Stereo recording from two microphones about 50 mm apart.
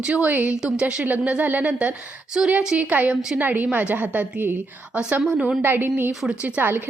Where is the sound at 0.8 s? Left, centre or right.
Right.